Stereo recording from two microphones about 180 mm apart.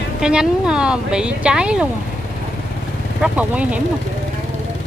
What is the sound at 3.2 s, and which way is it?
Speech, 5° right (ahead or behind).